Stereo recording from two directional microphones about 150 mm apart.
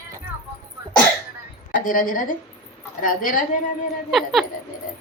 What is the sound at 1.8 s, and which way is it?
A woman's voice, 65° left (ahead or behind).